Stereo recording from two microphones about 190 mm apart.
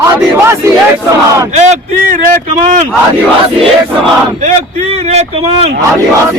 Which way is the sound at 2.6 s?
40° right (ahead or behind).